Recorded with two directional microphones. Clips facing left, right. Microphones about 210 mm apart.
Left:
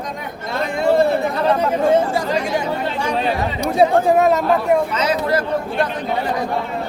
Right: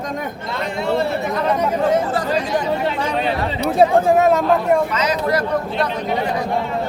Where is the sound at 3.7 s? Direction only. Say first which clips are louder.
Even; centre (ahead or behind).